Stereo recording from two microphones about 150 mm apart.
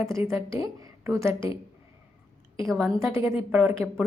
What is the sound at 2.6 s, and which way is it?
Speech, centre (ahead or behind).